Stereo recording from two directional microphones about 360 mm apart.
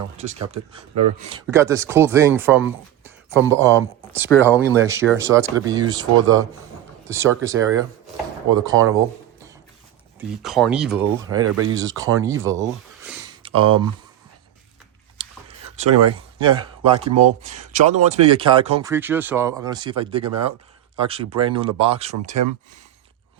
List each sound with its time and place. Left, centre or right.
0.2 s speech: centre
11.3 s speech: right
11.8 s speech: centre
13.1 s a sound: centre
15.2 s a sound: centre
16.4 s speech: centre